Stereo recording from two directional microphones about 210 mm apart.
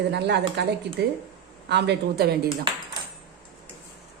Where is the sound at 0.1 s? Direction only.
55° right (ahead or behind).